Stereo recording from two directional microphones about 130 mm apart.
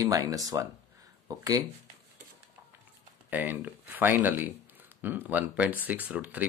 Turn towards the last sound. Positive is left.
turn(degrees=-10)  # may be behind; listen again after turning